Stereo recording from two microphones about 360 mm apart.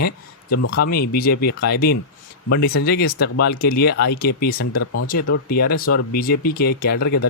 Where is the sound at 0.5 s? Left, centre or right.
Left.